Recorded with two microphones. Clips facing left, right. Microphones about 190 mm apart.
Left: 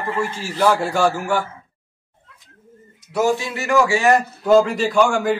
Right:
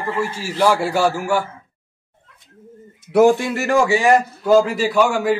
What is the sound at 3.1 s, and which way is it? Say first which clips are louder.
Speech: right 6 dB; 55° right (ahead or behind).